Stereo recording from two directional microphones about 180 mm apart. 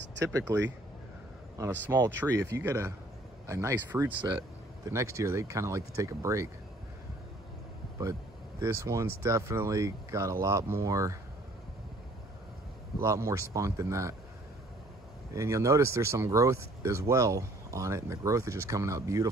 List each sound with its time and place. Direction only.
0.2 s speech: 15° right (ahead or behind)
8.0 s speech: 20° right (ahead or behind)
13.0 s speech: 15° right (ahead or behind)
15.3 s speech: 15° right (ahead or behind)